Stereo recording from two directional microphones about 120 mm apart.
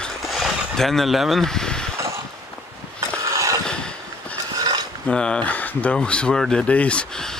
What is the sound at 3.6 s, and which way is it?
Vehicle, 5° left (ahead or behind).